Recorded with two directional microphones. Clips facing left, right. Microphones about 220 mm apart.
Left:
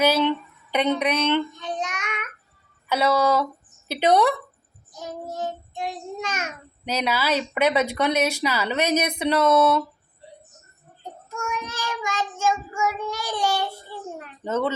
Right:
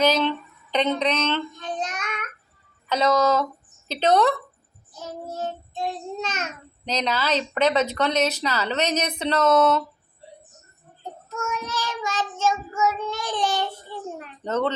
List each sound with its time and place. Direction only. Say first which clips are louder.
0.0 s child singing: left 1 dB; 10° left (ahead or behind)
2.9 s child singing: even; 10° left (ahead or behind)
11.3 s child singing: right 1 dB; 15° left (ahead or behind)